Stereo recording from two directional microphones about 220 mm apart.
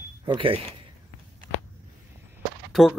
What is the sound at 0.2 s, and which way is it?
Speech, 25° right (ahead or behind).